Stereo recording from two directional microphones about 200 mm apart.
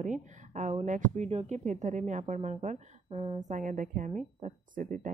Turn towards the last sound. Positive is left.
turn(degrees=-45)  # may be behind; listen again after turning